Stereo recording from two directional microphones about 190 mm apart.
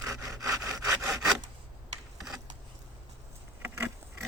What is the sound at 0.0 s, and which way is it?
Sawing, 20° right (ahead or behind).